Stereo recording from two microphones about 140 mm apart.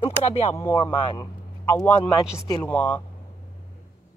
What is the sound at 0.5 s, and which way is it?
Speech, 15° left (ahead or behind).